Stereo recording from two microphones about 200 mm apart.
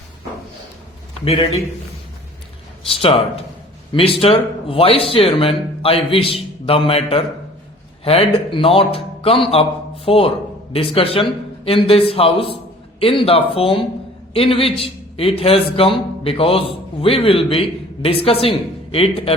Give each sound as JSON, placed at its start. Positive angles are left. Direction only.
{"t": 1.2, "sound": "a man's voice", "side_deg": 30}
{"t": 2.8, "sound": "a man's voice", "side_deg": 30}